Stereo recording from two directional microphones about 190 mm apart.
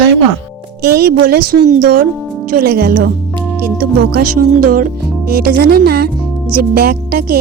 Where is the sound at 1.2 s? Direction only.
50° right (ahead or behind).